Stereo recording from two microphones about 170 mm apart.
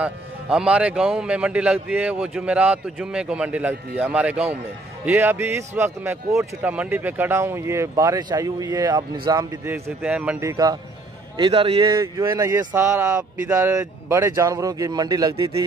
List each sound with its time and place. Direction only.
0.0 s a man's voice: 5° right (ahead or behind)
10.0 s a man's voice: 5° right (ahead or behind); by 15.6 s 25° right (ahead or behind)